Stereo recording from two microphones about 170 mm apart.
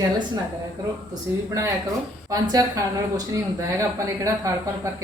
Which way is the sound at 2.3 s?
20° right (ahead or behind).